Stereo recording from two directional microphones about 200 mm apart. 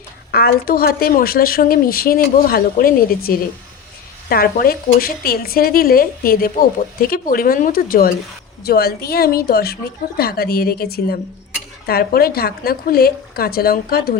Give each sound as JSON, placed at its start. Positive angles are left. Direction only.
{"t": 0.3, "sound": "speech", "side_deg": 50}
{"t": 4.3, "sound": "speech", "side_deg": 50}